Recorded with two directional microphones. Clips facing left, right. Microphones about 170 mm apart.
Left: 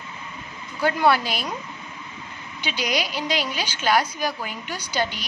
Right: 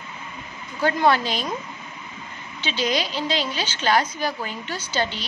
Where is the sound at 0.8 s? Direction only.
10° left (ahead or behind).